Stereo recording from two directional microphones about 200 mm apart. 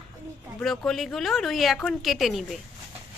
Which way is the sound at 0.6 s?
Centre (ahead or behind).